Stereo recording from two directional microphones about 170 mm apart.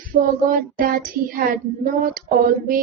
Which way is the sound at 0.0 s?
55° right (ahead or behind).